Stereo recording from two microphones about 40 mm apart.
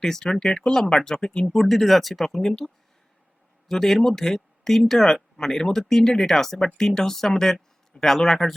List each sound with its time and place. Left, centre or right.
0.0 s speech: centre
1.5 s speech: centre
2.4 s speech: centre
3.7 s speech: centre